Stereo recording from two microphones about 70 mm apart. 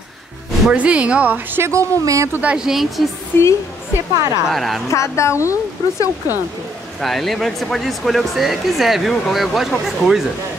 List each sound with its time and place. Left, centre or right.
0.7 s a woman's voice: centre
1.6 s speech: right
2.5 s speech: centre
3.3 s a woman's voice: left
4.5 s speech: centre
4.9 s speech: left
7.0 s speech: centre